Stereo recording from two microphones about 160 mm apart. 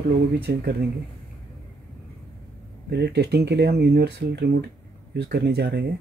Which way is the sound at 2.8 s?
90° right.